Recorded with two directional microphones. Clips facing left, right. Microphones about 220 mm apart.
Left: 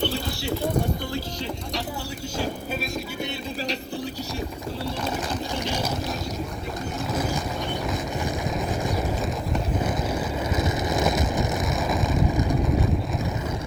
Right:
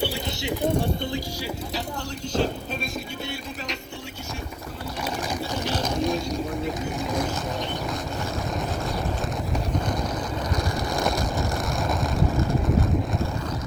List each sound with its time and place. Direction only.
0.0 s a sound: 15° right (ahead or behind)
5.6 s boat: 10° left (ahead or behind)
7.1 s vehicle: 5° left (ahead or behind)
10.9 s vehicle: centre (ahead or behind)